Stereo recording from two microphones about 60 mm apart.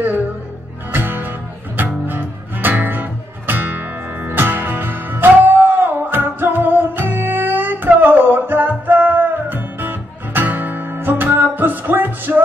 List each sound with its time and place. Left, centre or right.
0.9 s music: right